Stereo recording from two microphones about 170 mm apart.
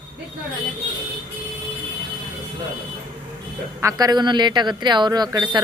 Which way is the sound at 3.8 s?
20° right (ahead or behind).